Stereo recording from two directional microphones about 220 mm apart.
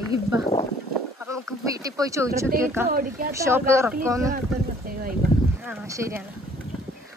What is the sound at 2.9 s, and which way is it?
Speech, 40° right (ahead or behind).